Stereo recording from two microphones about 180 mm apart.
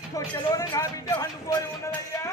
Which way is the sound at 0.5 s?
20° left (ahead or behind).